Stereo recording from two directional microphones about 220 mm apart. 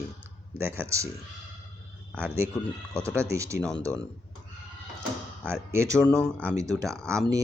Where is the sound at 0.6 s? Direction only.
10° right (ahead or behind).